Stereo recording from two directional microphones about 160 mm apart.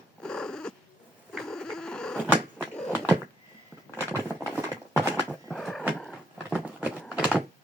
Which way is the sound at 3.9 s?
15° right (ahead or behind).